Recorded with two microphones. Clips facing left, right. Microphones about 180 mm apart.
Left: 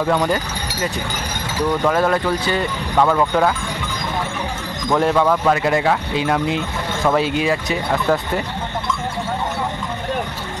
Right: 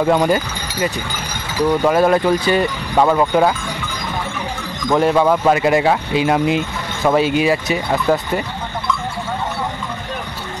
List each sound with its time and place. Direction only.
0.0 s speech: 20° right (ahead or behind)
4.8 s speech: 5° right (ahead or behind)